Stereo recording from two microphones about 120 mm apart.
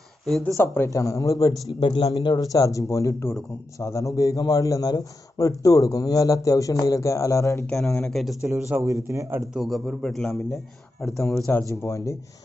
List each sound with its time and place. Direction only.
0.5 s a man's voice: 25° left (ahead or behind)
1.7 s a man's voice: 45° left (ahead or behind); by 7.6 s 25° left (ahead or behind)
7.7 s a man's voice: 5° left (ahead or behind)
8.5 s a man's voice: 25° right (ahead or behind)
9.6 s a man's voice: 5° left (ahead or behind)
11.7 s a man's voice: 25° left (ahead or behind)